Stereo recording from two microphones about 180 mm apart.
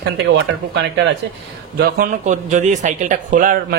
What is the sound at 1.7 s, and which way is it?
Speech, 55° right (ahead or behind).